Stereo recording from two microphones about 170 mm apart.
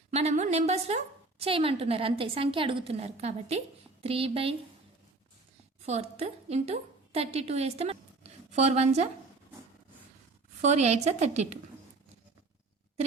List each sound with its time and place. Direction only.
0.1 s a woman's voice: 40° right (ahead or behind)
5.8 s a woman's voice: 40° right (ahead or behind)
10.6 s a woman's voice: 40° right (ahead or behind)